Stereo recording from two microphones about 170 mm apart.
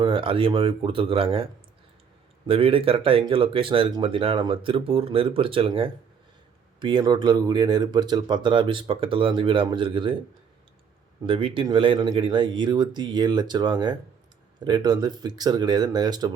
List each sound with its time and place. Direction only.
0.0 s speech: 30° right (ahead or behind)
2.5 s speech: 35° right (ahead or behind)
11.3 s speech: 30° right (ahead or behind)